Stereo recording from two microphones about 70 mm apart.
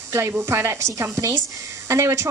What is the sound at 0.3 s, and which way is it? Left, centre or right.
A woman's voice, right.